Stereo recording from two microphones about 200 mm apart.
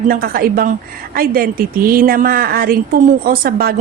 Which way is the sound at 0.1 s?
45° right (ahead or behind).